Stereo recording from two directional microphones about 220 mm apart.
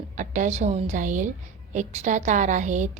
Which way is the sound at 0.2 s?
35° right (ahead or behind).